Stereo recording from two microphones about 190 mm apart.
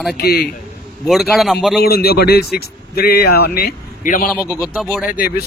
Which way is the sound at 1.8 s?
55° left (ahead or behind).